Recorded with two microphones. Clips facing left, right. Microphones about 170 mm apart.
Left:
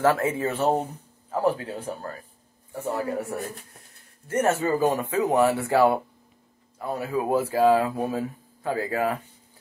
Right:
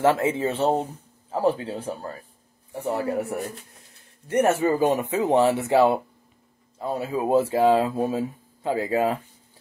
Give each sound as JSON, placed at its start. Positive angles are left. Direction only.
{"t": 0.0, "sound": "speech", "side_deg": -20}